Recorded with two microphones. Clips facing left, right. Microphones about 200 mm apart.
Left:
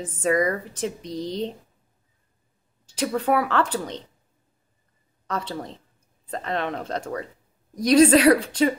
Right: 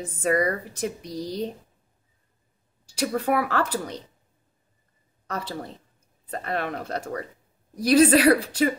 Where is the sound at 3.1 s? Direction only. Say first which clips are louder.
Left 2 dB; 40° right (ahead or behind).